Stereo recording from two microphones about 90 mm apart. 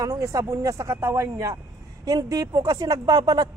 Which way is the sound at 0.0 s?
35° right (ahead or behind).